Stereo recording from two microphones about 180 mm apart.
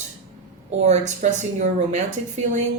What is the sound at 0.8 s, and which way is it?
Speech, 40° right (ahead or behind).